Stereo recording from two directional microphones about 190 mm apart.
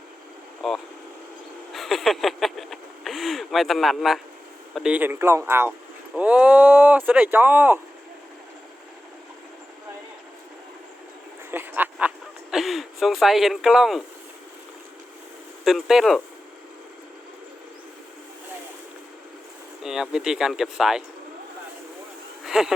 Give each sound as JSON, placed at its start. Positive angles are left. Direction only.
{"t": 0.6, "sound": "speech", "side_deg": 0}
{"t": 1.7, "sound": "a sound", "side_deg": 0}
{"t": 4.7, "sound": "speech", "side_deg": -5}
{"t": 11.5, "sound": "a sound", "side_deg": -10}
{"t": 15.6, "sound": "speech", "side_deg": 0}
{"t": 19.8, "sound": "speech", "side_deg": 0}
{"t": 22.4, "sound": "speech", "side_deg": -5}